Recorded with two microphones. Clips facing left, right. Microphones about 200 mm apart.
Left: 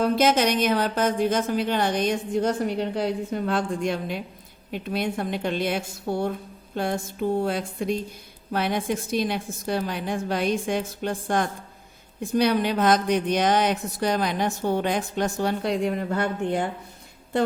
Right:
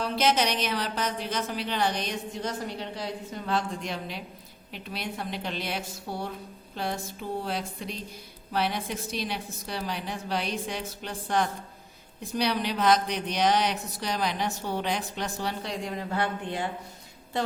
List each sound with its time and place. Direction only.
0.0 s speech: 50° left (ahead or behind)